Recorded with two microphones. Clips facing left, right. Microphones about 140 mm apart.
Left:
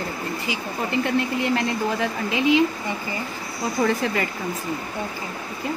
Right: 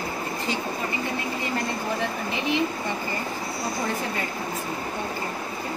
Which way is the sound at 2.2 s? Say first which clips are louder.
Left 8 dB; 90° left.